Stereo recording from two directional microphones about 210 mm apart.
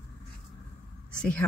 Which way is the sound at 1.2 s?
5° left (ahead or behind).